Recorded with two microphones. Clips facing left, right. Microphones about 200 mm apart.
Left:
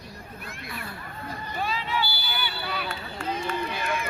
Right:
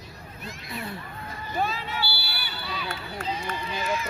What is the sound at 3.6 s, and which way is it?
Run, 60° left (ahead or behind).